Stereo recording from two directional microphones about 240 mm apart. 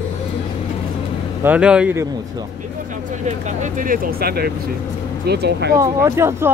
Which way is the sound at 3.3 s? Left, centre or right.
Right.